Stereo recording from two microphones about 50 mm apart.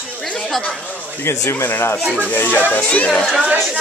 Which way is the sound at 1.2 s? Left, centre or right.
Left.